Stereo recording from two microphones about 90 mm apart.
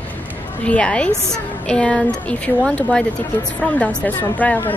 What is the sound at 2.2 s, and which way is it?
Speech, 15° left (ahead or behind).